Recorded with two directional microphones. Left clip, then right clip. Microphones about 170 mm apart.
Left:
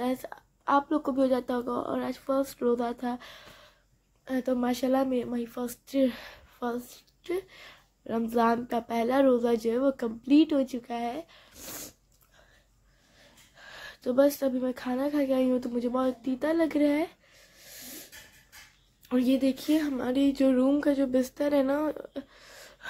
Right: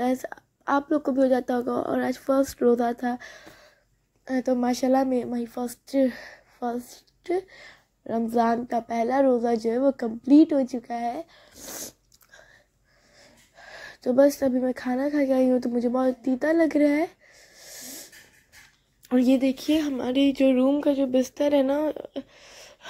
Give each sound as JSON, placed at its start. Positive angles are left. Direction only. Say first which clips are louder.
{"t": 0.0, "sound": "speech", "louder": "right 5 dB", "side_deg": -20}
{"t": 6.7, "sound": "a woman's voice", "louder": "right 3 dB", "side_deg": -15}
{"t": 13.2, "sound": "a sound", "louder": "right 2 dB", "side_deg": -25}
{"t": 14.4, "sound": "a woman's voice", "louder": "right 5 dB", "side_deg": -20}